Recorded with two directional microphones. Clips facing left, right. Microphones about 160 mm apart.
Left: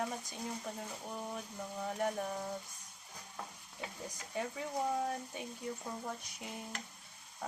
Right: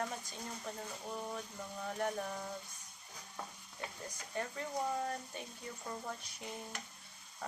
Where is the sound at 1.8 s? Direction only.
10° left (ahead or behind).